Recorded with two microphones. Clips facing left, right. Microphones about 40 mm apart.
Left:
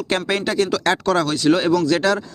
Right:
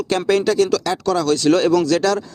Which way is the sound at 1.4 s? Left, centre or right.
Centre.